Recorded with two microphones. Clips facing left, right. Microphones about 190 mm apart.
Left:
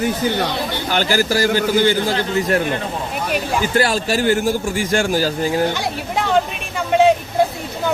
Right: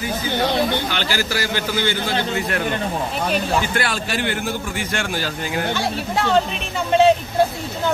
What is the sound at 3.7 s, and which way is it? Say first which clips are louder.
A man's voice: left 6 dB; 40° left (ahead or behind).